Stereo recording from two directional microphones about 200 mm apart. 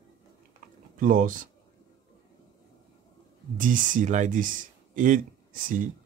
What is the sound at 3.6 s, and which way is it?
Speech, 40° right (ahead or behind).